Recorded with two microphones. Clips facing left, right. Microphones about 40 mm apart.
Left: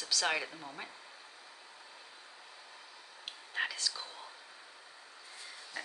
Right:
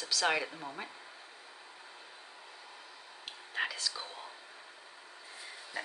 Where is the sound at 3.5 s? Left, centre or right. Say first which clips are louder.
Right 1 dB; centre.